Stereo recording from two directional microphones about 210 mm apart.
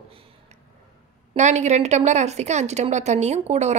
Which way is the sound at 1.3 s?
35° right (ahead or behind).